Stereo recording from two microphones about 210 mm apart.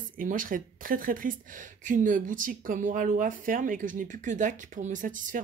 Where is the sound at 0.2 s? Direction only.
40° right (ahead or behind).